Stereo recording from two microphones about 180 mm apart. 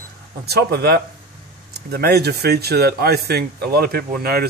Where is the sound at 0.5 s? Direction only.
60° right (ahead or behind).